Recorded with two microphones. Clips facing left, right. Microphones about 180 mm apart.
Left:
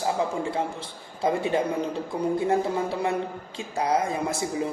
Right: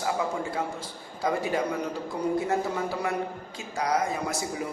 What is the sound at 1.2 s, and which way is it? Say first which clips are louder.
A man's voice: left 3 dB; 25° left (ahead or behind).